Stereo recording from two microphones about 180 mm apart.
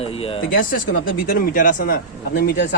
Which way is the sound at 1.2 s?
50° left (ahead or behind).